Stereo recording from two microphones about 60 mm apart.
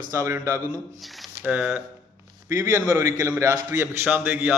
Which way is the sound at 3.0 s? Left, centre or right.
Right.